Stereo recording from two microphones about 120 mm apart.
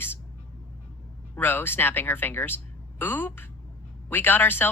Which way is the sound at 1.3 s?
15° left (ahead or behind).